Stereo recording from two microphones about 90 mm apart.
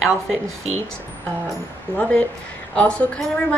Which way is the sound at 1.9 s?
15° left (ahead or behind).